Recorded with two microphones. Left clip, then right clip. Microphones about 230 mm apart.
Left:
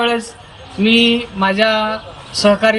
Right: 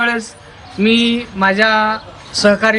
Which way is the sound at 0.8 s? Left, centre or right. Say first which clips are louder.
Left 2 dB; centre.